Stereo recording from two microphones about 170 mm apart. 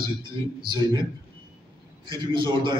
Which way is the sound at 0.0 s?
30° right (ahead or behind).